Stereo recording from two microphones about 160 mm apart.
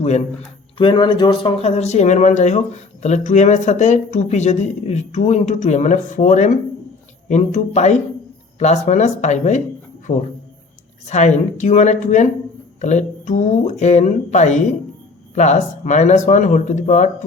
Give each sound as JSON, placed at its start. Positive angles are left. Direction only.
{"t": 0.8, "sound": "speech", "side_deg": 30}
{"t": 11.0, "sound": "speech", "side_deg": 45}